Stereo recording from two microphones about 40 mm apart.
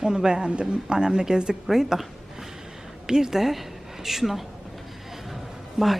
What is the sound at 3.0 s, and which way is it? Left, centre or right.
A woman's voice, centre.